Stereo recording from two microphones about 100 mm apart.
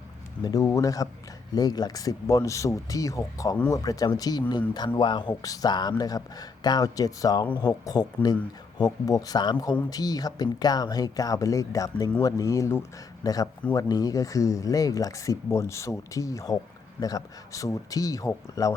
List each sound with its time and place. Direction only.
0.6 s speech: 30° left (ahead or behind)